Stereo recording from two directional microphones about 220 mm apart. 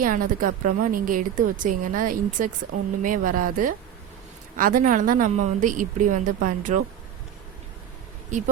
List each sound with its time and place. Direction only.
0.0 s a woman's voice: 40° right (ahead or behind)